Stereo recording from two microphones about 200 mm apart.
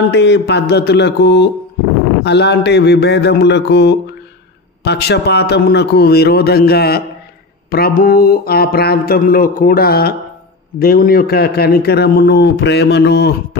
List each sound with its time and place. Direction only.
0.1 s a man's voice: 60° left (ahead or behind)